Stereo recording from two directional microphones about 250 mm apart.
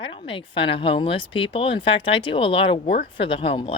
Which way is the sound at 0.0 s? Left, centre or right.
Left.